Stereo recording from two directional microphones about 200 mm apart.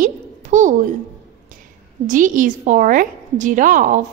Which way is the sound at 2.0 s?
40° right (ahead or behind).